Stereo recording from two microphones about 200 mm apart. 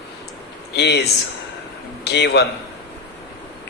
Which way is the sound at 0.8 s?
55° left (ahead or behind).